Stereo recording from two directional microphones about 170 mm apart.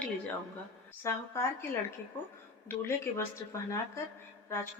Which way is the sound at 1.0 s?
15° left (ahead or behind).